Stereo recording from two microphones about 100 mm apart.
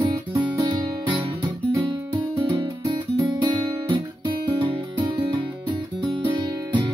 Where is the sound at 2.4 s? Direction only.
50° right (ahead or behind).